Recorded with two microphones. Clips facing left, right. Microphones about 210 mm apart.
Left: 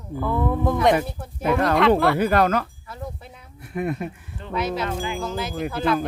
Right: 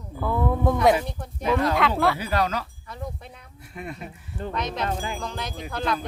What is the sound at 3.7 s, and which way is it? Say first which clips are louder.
Speech: left 10 dB; 55° left (ahead or behind).